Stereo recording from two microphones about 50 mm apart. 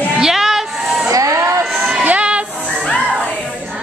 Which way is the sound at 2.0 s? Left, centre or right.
Right.